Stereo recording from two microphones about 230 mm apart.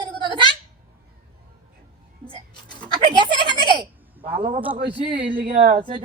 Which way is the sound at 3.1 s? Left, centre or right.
Centre.